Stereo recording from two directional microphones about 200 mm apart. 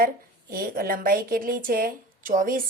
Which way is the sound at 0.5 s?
45° right (ahead or behind).